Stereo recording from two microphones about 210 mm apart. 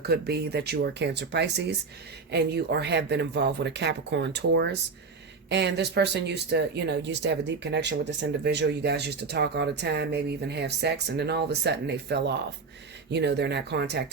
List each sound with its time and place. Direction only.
0.0 s speech: 50° right (ahead or behind)